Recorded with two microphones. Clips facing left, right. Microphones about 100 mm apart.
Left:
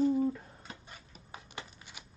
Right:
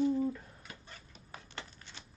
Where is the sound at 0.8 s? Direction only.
10° left (ahead or behind).